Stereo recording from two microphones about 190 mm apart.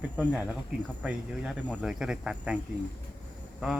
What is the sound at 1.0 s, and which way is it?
A man's voice, 5° right (ahead or behind).